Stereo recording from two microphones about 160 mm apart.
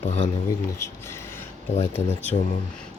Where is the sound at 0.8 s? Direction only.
15° left (ahead or behind).